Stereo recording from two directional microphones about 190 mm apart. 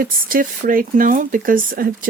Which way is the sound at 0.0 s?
45° right (ahead or behind).